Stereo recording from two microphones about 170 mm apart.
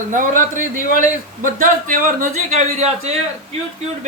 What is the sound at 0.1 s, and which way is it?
A man's voice, 50° right (ahead or behind).